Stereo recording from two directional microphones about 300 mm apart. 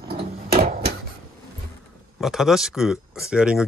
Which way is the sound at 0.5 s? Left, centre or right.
Right.